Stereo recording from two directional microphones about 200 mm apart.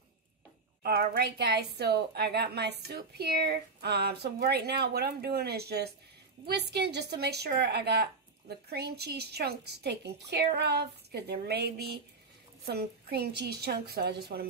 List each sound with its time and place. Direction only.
0.8 s a woman's voice: 50° right (ahead or behind)